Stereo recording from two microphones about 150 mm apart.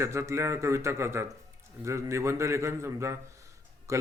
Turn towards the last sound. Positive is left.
turn(degrees=-20)  # may be behind; listen again after turning